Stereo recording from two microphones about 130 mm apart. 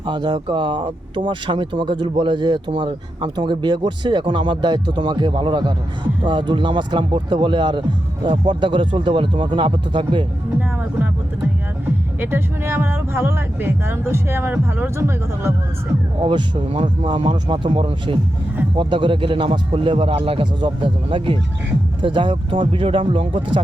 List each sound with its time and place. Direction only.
0.0 s speech: 35° right (ahead or behind)
12.2 s speech: 15° right (ahead or behind)
16.2 s speech: 40° right (ahead or behind)